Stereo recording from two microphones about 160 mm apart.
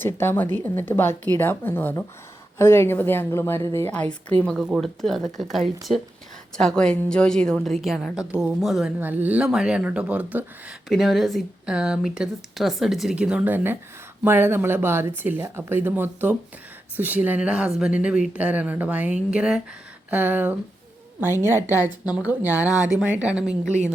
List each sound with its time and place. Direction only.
0.0 s a woman's voice: 15° left (ahead or behind); by 23.8 s 5° right (ahead or behind)